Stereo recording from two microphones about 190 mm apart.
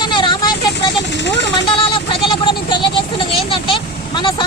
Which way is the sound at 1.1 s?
65° left (ahead or behind).